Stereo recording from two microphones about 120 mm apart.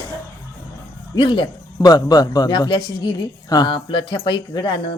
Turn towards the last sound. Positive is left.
turn(degrees=35)  # may be behind; listen again after turning